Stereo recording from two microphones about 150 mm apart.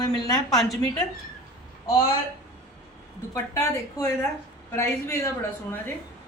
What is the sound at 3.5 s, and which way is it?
A woman's voice, 20° left (ahead or behind).